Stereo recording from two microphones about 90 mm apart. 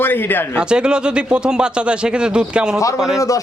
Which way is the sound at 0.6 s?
10° right (ahead or behind).